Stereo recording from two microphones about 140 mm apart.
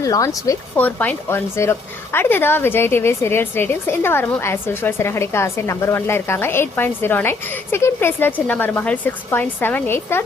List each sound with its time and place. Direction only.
0.0 s speech: 25° left (ahead or behind)
0.8 s a woman's voice: 10° left (ahead or behind)